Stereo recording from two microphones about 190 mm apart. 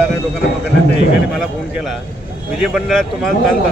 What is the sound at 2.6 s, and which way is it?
Speech, centre (ahead or behind).